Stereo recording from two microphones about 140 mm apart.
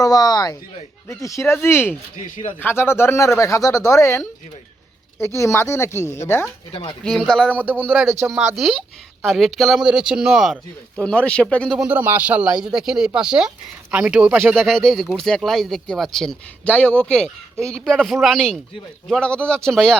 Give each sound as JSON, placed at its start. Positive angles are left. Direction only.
{"t": 0.0, "sound": "speech", "side_deg": 25}
{"t": 7.0, "sound": "speech", "side_deg": 5}
{"t": 7.5, "sound": "speech", "side_deg": -10}
{"t": 8.3, "sound": "speech", "side_deg": -5}
{"t": 11.8, "sound": "speech", "side_deg": -10}
{"t": 14.5, "sound": "speech", "side_deg": 0}